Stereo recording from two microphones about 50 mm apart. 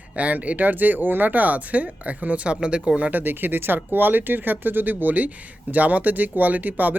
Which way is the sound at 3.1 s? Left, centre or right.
Right.